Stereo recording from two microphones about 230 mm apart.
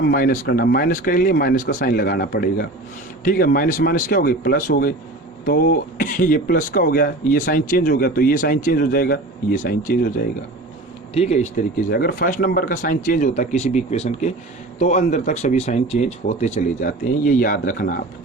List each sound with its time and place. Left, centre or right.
0.1 s speech: left
11.1 s speech: left